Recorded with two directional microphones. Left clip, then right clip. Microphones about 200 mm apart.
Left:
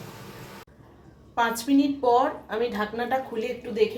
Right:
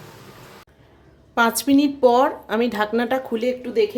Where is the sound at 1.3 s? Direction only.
60° right (ahead or behind).